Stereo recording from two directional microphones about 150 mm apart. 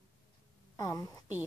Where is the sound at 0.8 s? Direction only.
25° left (ahead or behind).